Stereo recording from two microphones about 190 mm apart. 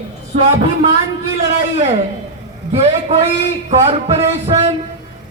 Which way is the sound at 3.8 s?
30° right (ahead or behind).